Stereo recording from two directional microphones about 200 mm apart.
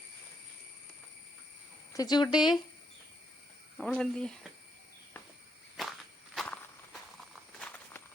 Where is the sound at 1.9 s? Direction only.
20° left (ahead or behind).